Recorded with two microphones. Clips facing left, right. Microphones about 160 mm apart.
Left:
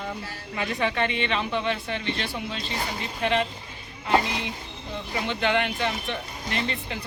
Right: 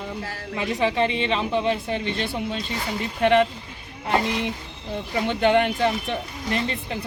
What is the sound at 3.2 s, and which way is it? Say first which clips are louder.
Speech: right 7 dB; 55° right (ahead or behind).